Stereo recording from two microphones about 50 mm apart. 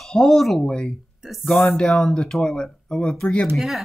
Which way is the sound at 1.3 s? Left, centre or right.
Centre.